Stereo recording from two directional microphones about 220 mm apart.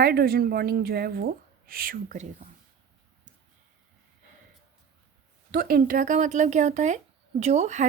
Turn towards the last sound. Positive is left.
turn(degrees=-30)  # may be behind; listen again after turning